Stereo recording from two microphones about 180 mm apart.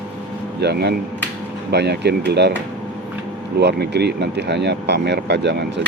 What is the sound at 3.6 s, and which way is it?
Speech, 70° right (ahead or behind).